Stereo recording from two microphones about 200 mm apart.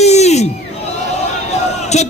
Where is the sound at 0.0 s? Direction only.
35° left (ahead or behind).